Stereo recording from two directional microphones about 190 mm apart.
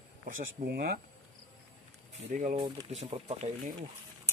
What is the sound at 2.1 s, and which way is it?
Speech, 40° right (ahead or behind).